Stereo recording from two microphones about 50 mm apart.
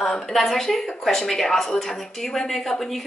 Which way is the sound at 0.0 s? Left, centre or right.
Centre.